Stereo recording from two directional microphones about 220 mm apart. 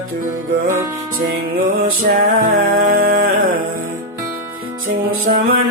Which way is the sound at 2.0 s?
40° right (ahead or behind).